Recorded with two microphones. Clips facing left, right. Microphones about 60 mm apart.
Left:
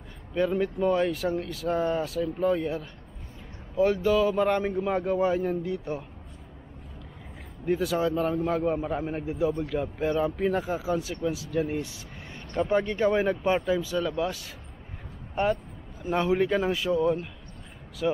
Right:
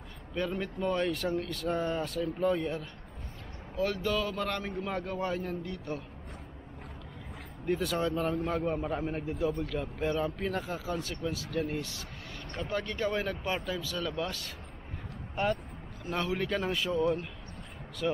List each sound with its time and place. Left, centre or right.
0.3 s speech: centre
3.7 s speech: centre
7.6 s speech: centre
16.1 s speech: centre